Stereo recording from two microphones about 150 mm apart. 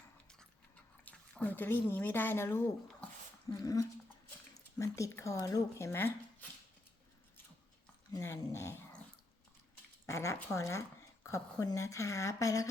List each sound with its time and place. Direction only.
1.0 s speech: 10° left (ahead or behind)
8.1 s speech: 20° left (ahead or behind)
10.1 s speech: 20° left (ahead or behind)